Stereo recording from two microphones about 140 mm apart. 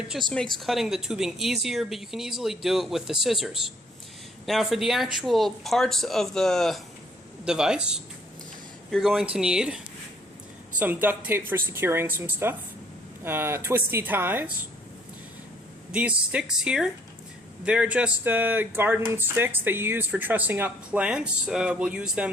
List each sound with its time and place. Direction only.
0.1 s speech: centre (ahead or behind)
15.9 s speech: 10° right (ahead or behind)